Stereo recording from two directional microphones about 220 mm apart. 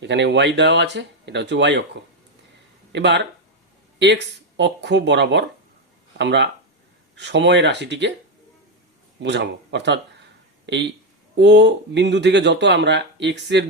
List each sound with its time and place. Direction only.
0.0 s speech: 50° right (ahead or behind)
2.9 s speech: 50° right (ahead or behind)
9.2 s speech: 50° right (ahead or behind)